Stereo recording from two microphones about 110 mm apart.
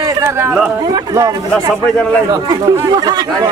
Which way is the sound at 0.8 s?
35° right (ahead or behind).